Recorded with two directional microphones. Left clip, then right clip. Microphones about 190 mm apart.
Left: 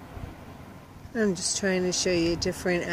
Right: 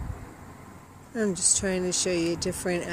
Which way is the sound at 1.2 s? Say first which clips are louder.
Even; 5° right (ahead or behind).